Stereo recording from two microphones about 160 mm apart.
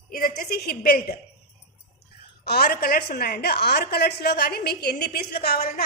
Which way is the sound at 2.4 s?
85° left.